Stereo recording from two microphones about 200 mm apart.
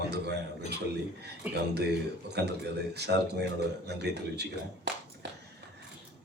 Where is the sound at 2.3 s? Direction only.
55° right (ahead or behind).